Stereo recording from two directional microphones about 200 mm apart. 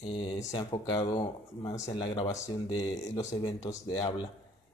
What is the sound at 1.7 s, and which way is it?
Speech, 20° left (ahead or behind).